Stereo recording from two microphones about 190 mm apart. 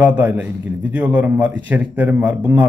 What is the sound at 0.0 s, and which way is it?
Speech, 10° right (ahead or behind).